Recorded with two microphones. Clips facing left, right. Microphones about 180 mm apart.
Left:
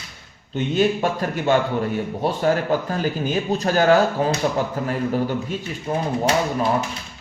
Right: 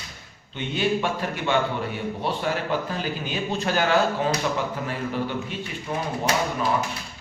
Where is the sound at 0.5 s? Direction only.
45° left (ahead or behind).